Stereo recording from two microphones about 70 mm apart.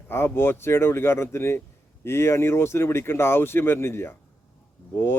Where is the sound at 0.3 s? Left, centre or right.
Left.